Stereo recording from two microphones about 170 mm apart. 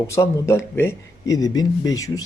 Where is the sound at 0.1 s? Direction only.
15° left (ahead or behind).